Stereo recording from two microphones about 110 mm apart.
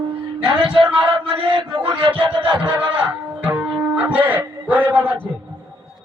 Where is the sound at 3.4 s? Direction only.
15° right (ahead or behind).